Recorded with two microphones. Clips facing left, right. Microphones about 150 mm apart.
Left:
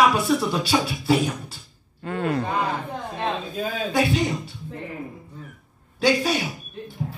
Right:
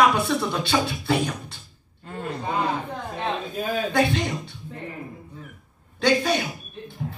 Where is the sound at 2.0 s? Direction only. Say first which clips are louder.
Left 7 dB; 85° left.